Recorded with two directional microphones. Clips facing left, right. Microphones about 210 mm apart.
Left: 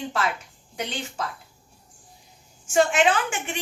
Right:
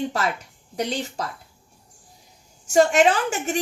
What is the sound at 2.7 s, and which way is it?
Speech, 40° right (ahead or behind).